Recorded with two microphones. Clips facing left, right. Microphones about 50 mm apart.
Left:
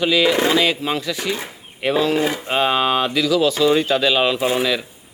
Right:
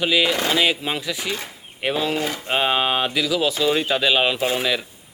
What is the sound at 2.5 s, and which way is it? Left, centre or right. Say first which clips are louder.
Speech: left 1 dB; centre.